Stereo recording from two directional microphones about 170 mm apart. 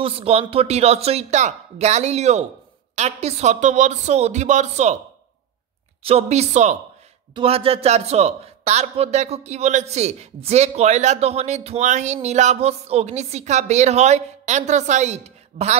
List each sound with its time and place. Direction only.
0.0 s a man's voice: 35° right (ahead or behind)
6.0 s a man's voice: 40° right (ahead or behind)